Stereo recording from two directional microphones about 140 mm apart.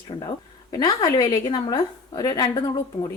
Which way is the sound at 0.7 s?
30° left (ahead or behind).